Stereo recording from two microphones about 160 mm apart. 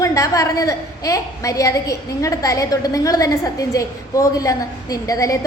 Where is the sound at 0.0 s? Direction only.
20° left (ahead or behind).